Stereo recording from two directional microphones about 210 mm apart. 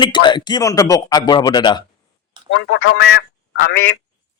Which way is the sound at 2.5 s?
60° left (ahead or behind).